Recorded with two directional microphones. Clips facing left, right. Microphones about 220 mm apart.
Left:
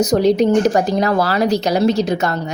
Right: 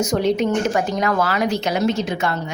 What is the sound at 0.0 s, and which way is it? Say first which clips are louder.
Speech: left 5 dB; 35° left (ahead or behind).